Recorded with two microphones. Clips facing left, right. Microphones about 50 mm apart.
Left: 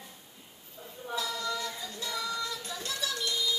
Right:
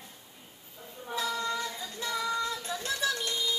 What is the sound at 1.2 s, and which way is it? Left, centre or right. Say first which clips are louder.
Singing: right 2 dB; right.